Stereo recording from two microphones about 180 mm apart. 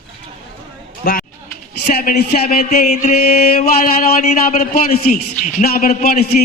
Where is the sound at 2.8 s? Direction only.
40° left (ahead or behind).